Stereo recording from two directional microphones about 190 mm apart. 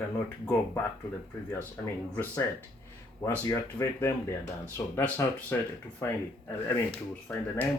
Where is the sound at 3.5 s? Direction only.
15° left (ahead or behind).